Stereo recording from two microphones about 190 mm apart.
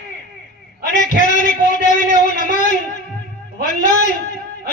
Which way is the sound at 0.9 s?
45° left (ahead or behind).